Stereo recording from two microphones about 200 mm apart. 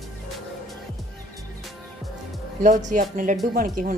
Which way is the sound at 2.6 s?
40° right (ahead or behind).